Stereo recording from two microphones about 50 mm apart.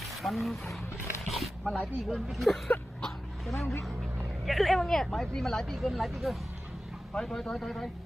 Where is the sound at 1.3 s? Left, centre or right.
Centre.